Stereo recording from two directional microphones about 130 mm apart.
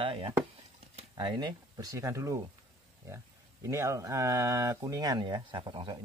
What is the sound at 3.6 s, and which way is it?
Speech, 25° right (ahead or behind).